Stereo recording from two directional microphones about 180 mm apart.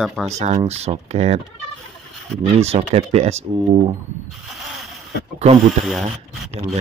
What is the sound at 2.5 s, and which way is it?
Speech, 35° right (ahead or behind).